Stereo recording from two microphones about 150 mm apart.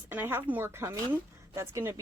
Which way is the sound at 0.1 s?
15° right (ahead or behind).